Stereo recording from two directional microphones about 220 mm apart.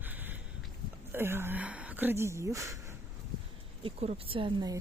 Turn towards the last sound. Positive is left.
turn(degrees=-20)  # may be behind; listen again after turning